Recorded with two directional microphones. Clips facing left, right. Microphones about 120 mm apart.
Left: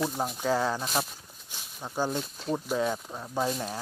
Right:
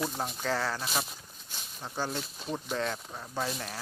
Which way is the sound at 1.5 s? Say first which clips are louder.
Left 2 dB; 15° left (ahead or behind).